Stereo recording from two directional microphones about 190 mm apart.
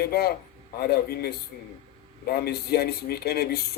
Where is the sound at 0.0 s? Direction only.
55° left (ahead or behind).